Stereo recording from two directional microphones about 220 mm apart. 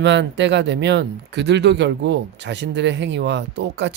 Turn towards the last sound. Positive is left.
turn(degrees=-50)  # may be behind; listen again after turning